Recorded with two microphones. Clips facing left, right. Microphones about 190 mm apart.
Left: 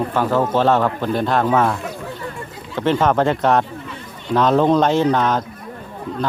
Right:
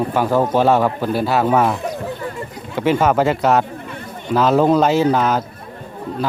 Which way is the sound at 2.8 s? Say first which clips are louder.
Right 1 dB; 10° right (ahead or behind).